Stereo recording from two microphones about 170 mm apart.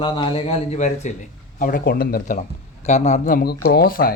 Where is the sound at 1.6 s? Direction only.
60° left (ahead or behind).